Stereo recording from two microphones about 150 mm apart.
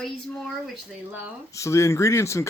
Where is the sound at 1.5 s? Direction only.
20° left (ahead or behind).